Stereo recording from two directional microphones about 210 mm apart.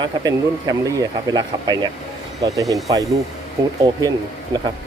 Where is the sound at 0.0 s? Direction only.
20° right (ahead or behind).